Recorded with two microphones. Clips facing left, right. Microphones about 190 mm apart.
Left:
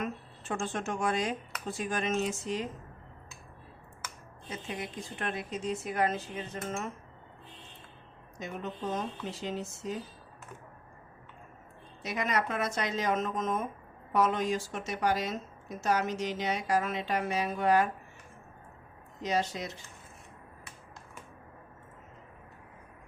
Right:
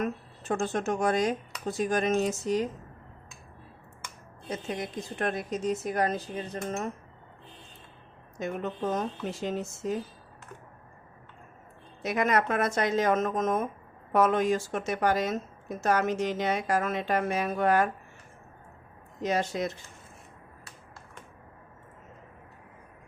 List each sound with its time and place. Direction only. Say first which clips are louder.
0.0 s speech: right 5 dB; 40° right (ahead or behind)
4.4 s speech: right 5 dB; 40° right (ahead or behind)
8.4 s speech: right 6 dB; 55° right (ahead or behind)
12.0 s speech: right 5 dB; 50° right (ahead or behind)
19.2 s speech: right 3 dB; 50° right (ahead or behind)